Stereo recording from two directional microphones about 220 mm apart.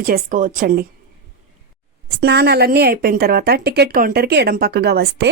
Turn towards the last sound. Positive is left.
turn(degrees=-50)  # may be behind; listen again after turning